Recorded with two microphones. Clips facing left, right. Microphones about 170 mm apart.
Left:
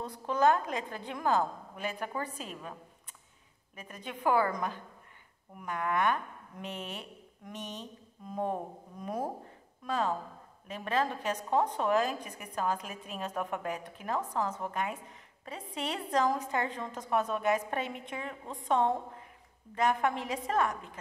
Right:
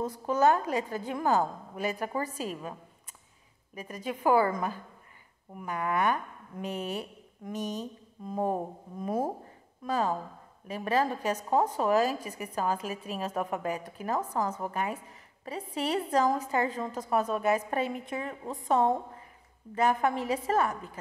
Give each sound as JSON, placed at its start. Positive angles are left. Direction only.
{"t": 0.3, "sound": "a woman's voice", "side_deg": -5}
{"t": 3.7, "sound": "a woman's voice", "side_deg": -5}
{"t": 7.5, "sound": "speech", "side_deg": -40}
{"t": 7.8, "sound": "mantra", "side_deg": -5}
{"t": 10.7, "sound": "a woman's voice", "side_deg": -5}